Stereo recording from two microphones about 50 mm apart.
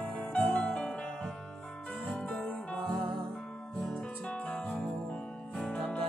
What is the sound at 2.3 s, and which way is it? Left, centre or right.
Music, left.